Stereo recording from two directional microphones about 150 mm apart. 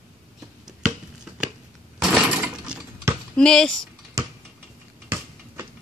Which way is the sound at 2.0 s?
5° right (ahead or behind).